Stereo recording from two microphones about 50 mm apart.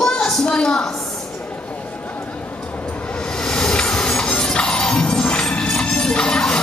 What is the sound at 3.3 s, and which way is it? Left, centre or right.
Music, centre.